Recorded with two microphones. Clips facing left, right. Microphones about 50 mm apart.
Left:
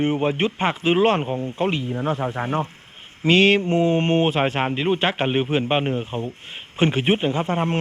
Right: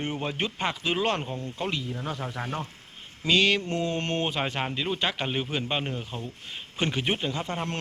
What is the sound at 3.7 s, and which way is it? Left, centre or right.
Speech, left.